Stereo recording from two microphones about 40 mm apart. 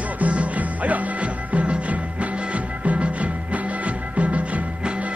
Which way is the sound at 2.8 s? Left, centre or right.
Right.